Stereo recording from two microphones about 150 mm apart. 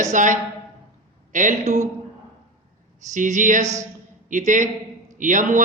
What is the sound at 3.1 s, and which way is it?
A man's voice, 55° right (ahead or behind).